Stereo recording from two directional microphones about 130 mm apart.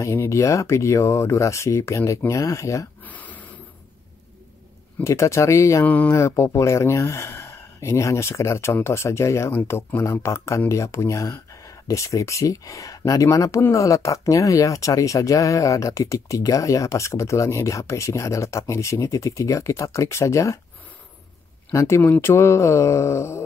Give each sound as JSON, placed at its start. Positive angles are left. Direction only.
{"t": 0.0, "sound": "speech", "side_deg": 20}
{"t": 3.1, "sound": "a sound", "side_deg": 10}
{"t": 5.0, "sound": "speech", "side_deg": 20}
{"t": 5.9, "sound": "speech", "side_deg": 10}
{"t": 21.7, "sound": "speech", "side_deg": 20}